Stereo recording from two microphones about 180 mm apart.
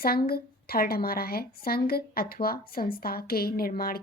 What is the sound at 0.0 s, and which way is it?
Speech, 60° left (ahead or behind).